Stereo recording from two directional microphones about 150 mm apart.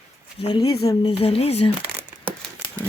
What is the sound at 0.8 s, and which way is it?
Speech, 35° left (ahead or behind).